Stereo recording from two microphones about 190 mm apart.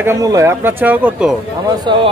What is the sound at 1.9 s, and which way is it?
Speech, 25° right (ahead or behind).